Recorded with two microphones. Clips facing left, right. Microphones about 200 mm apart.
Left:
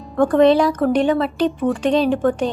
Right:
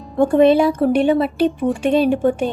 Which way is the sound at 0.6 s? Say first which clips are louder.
Right 2 dB; 30° right (ahead or behind).